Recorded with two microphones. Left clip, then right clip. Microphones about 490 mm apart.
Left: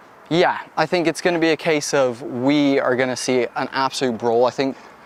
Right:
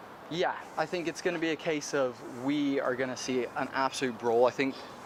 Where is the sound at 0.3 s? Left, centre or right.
Left.